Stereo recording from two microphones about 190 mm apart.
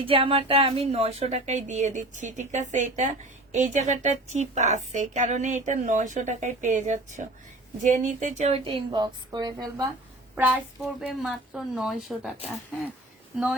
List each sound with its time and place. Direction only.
0.0 s a woman's voice: 30° right (ahead or behind)
10.3 s a child's voice: 10° right (ahead or behind)